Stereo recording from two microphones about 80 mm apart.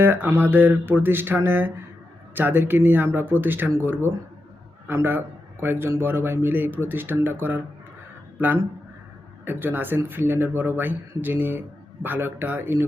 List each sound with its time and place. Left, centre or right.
0.0 s speech: right